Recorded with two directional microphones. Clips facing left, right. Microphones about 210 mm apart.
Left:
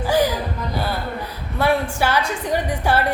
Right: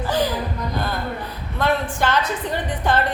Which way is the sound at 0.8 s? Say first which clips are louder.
Left 2 dB; 10° left (ahead or behind).